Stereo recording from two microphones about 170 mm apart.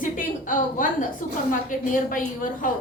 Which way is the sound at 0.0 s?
50° left (ahead or behind).